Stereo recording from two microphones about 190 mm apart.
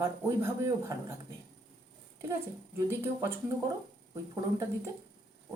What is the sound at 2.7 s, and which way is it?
Speech, 15° right (ahead or behind).